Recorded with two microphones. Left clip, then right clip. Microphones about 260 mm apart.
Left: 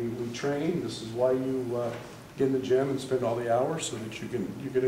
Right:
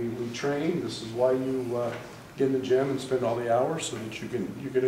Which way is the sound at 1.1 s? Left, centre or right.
Centre.